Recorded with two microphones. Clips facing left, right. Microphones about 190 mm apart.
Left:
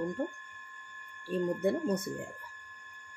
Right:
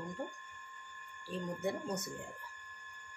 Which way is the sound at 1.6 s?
55° left (ahead or behind).